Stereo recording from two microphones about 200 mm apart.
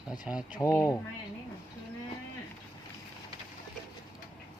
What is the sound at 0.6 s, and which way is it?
Speech, 15° left (ahead or behind).